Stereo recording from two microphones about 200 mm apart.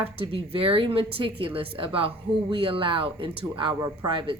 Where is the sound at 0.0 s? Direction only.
30° right (ahead or behind).